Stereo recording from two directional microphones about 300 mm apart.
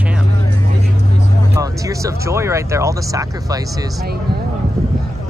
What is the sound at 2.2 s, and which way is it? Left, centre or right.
Speech, centre.